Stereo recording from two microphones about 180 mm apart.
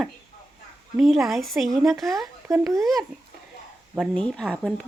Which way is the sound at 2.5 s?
20° right (ahead or behind).